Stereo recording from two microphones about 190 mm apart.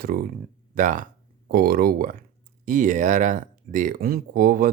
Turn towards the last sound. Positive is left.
turn(degrees=-50)  # may be behind; listen again after turning